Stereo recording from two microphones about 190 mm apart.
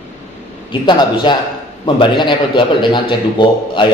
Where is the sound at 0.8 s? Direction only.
25° left (ahead or behind).